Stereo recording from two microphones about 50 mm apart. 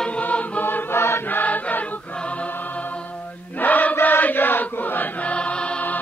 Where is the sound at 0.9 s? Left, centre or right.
Left.